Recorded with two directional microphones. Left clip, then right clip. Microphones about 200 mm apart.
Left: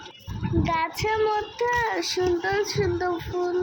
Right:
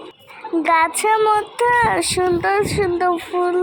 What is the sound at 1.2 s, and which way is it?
Child singing, 10° right (ahead or behind).